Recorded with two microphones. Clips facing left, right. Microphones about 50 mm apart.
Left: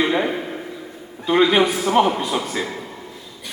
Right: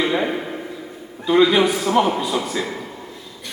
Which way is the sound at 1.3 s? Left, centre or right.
Left.